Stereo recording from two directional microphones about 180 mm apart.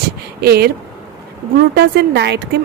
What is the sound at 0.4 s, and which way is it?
Speech, 60° right (ahead or behind).